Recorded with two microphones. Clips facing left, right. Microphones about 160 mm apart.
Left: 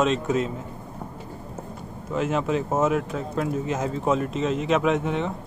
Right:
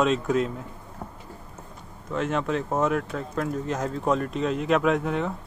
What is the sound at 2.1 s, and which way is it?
Speech, 5° left (ahead or behind).